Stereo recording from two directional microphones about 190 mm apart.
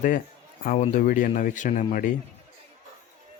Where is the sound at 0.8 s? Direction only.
45° left (ahead or behind).